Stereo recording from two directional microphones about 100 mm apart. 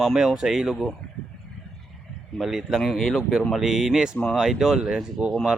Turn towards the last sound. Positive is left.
turn(degrees=-5)  # may be behind; listen again after turning